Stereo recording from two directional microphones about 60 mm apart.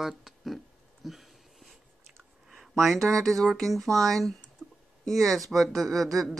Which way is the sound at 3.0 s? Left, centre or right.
Right.